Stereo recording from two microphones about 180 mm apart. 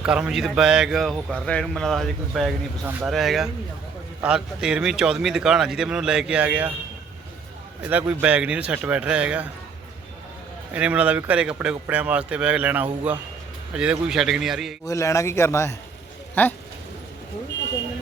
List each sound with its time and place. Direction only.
0.0 s speech: 5° right (ahead or behind)
7.8 s speech: 10° right (ahead or behind)
10.8 s speech: 10° right (ahead or behind)
14.8 s speech: 15° left (ahead or behind)